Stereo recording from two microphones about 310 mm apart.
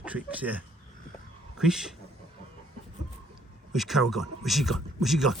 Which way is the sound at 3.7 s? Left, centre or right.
Centre.